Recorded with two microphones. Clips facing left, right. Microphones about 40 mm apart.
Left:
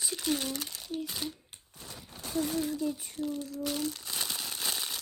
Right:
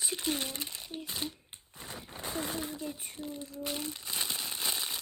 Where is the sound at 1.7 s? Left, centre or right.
Right; by 5.0 s centre.